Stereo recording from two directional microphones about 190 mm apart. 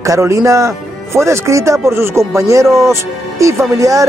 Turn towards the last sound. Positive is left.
turn(degrees=-15)  # may be behind; listen again after turning